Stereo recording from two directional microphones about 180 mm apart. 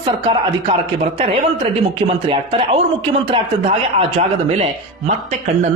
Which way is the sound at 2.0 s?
30° right (ahead or behind).